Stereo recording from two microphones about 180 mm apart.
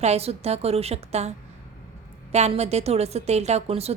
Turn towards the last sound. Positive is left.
turn(degrees=-35)  # may be behind; listen again after turning